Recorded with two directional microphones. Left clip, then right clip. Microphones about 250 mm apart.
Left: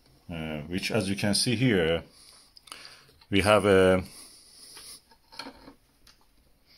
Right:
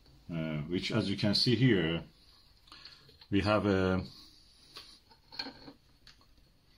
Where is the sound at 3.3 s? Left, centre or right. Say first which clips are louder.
Left 9 dB; left.